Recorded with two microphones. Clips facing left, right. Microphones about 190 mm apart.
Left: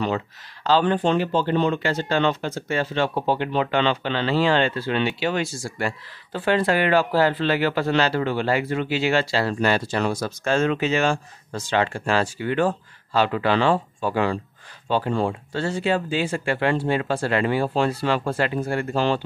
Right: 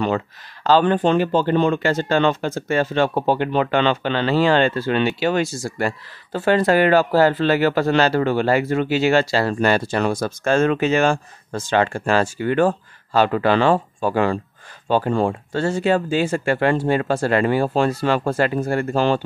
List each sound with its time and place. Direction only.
0.7 s speech: 50° right (ahead or behind)